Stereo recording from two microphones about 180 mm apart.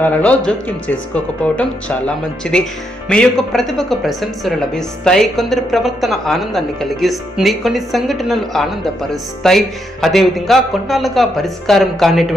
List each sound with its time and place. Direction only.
0.0 s a woman's voice: 10° left (ahead or behind)